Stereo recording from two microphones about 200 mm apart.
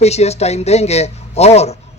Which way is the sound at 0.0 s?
30° left (ahead or behind).